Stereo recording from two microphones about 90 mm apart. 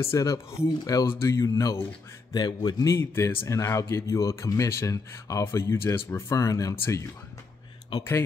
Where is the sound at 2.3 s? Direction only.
50° left (ahead or behind).